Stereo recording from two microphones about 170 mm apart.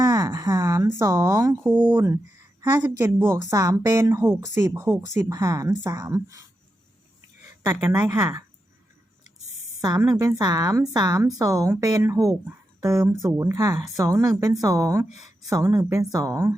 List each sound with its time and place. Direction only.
0.0 s speech: 20° right (ahead or behind)
7.6 s a woman's voice: 25° right (ahead or behind)
10.1 s speech: 20° right (ahead or behind)